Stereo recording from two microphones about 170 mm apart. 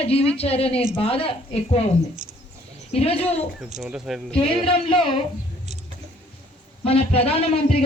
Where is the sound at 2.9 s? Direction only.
35° left (ahead or behind).